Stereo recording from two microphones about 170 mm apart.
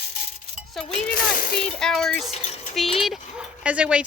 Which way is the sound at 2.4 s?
35° left (ahead or behind).